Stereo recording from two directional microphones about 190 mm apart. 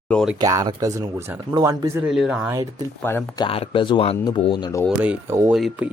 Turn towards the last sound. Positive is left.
turn(degrees=-5)  # may be behind; listen again after turning